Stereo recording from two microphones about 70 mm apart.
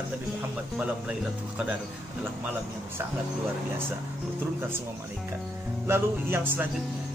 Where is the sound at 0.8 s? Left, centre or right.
Centre.